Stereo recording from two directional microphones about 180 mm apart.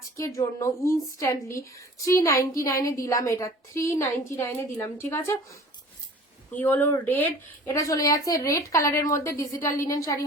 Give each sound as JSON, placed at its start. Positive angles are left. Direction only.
{"t": 0.2, "sound": "a woman's voice", "side_deg": 15}
{"t": 6.5, "sound": "a woman's voice", "side_deg": 10}